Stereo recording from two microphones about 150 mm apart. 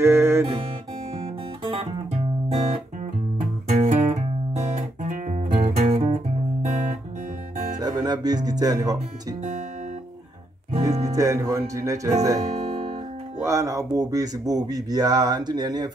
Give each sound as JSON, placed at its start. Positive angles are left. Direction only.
{"t": 0.0, "sound": "music", "side_deg": -15}
{"t": 1.2, "sound": "music", "side_deg": -35}
{"t": 3.7, "sound": "guitar", "side_deg": -50}
{"t": 7.8, "sound": "music", "side_deg": -25}
{"t": 10.8, "sound": "speech", "side_deg": -20}
{"t": 12.5, "sound": "music", "side_deg": -45}
{"t": 13.4, "sound": "speech", "side_deg": -20}